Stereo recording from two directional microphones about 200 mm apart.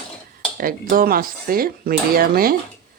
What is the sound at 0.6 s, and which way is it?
Speech, 45° right (ahead or behind).